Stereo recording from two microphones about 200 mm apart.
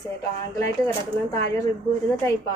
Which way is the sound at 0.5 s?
15° left (ahead or behind).